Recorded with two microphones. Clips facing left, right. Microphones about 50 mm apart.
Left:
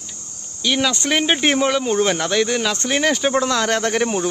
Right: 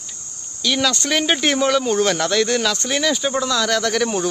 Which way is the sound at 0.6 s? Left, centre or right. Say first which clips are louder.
Even; centre.